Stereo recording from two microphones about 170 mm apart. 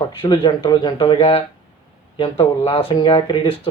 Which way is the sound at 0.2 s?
30° left (ahead or behind).